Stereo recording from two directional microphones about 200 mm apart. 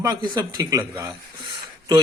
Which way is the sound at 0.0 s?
20° right (ahead or behind).